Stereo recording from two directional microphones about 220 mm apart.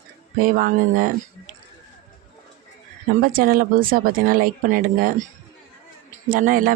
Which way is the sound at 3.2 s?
40° right (ahead or behind).